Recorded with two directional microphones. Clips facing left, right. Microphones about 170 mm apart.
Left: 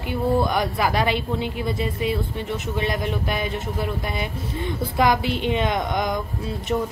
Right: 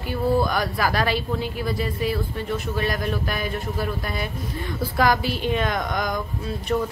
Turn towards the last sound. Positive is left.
turn(degrees=10)  # may be behind; listen again after turning